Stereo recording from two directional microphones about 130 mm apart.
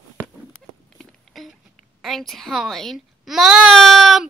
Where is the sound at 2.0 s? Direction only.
Centre (ahead or behind).